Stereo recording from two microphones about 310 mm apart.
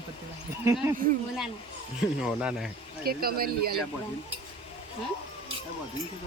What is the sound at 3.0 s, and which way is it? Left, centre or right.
Speech, right.